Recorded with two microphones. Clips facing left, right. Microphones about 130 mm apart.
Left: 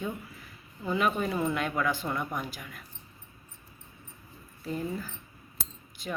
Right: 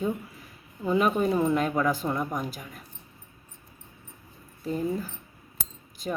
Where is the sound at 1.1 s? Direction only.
25° right (ahead or behind).